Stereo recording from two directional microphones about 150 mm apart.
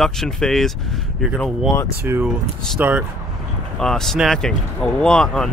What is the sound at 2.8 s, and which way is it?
Speech, 10° right (ahead or behind).